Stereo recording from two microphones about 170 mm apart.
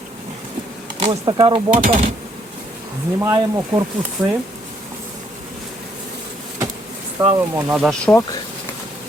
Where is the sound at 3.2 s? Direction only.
20° right (ahead or behind).